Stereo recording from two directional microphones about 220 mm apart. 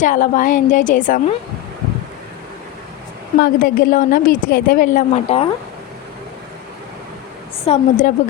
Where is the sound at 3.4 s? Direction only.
40° left (ahead or behind).